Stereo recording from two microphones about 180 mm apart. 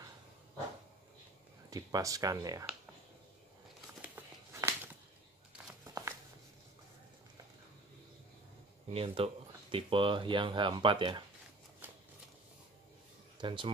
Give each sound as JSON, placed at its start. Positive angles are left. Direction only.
{"t": 1.7, "sound": "speech", "side_deg": -20}
{"t": 4.0, "sound": "a sound", "side_deg": -10}
{"t": 8.9, "sound": "speech", "side_deg": -30}
{"t": 11.8, "sound": "shuffling cards", "side_deg": -10}
{"t": 13.4, "sound": "speech", "side_deg": -25}